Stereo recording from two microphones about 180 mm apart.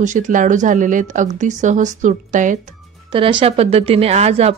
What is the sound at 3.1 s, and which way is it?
A woman's voice, 25° right (ahead or behind).